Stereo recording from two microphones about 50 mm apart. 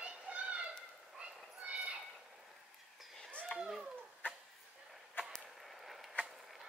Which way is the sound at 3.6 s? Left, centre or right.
Centre.